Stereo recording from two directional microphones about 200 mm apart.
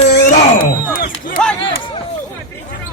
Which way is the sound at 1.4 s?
5° left (ahead or behind).